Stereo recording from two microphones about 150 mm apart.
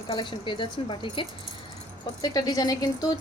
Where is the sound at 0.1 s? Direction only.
30° left (ahead or behind).